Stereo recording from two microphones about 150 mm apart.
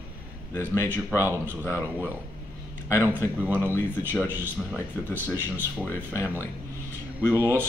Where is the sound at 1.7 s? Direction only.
15° right (ahead or behind).